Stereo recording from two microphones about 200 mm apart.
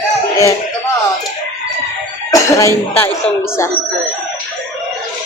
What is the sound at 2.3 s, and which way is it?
Music, 15° left (ahead or behind).